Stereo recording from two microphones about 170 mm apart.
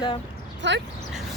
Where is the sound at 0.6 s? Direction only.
90° right.